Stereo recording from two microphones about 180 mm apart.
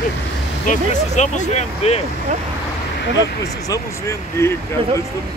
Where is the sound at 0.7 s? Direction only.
40° left (ahead or behind).